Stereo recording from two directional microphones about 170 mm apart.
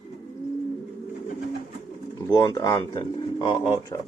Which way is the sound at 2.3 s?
25° left (ahead or behind).